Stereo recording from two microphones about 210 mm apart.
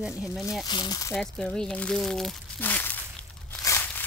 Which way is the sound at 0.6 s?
20° left (ahead or behind).